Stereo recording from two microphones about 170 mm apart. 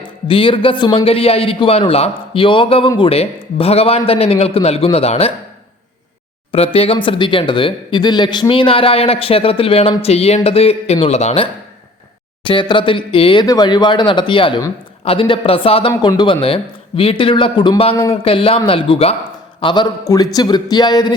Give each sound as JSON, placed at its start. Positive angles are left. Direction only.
{"t": 0.0, "sound": "speech", "side_deg": 30}
{"t": 6.5, "sound": "speech", "side_deg": 35}
{"t": 12.5, "sound": "speech", "side_deg": 30}